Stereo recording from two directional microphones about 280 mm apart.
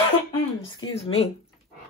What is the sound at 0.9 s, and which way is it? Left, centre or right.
Speech, left.